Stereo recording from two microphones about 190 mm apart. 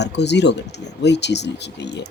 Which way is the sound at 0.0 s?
65° left (ahead or behind).